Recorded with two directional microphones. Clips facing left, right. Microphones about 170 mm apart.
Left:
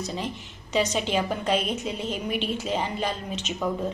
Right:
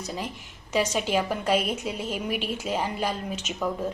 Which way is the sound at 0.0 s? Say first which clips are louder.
Left 2 dB; 10° right (ahead or behind).